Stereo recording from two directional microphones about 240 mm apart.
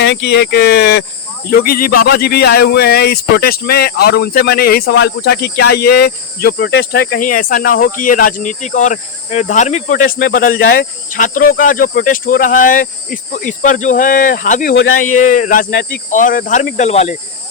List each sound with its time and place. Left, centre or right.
0.0 s speech: left